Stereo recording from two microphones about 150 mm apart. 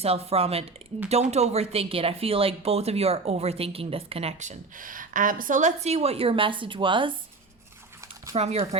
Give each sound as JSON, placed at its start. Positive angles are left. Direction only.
{"t": 0.0, "sound": "speech", "side_deg": -40}
{"t": 8.4, "sound": "speech", "side_deg": -45}